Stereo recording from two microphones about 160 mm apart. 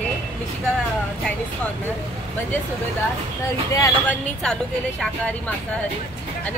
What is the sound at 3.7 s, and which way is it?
Speech, 20° left (ahead or behind).